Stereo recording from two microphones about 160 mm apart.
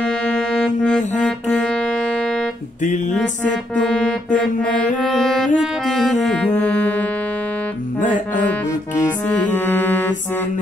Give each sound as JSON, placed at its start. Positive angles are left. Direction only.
{"t": 0.0, "sound": "music", "side_deg": 5}
{"t": 2.8, "sound": "music", "side_deg": 50}
{"t": 3.2, "sound": "music", "side_deg": 5}
{"t": 9.3, "sound": "music", "side_deg": 10}